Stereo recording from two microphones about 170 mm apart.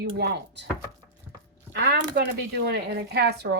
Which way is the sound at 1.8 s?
70° right (ahead or behind).